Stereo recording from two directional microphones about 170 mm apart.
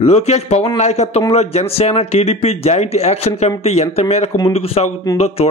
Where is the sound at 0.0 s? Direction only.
40° left (ahead or behind).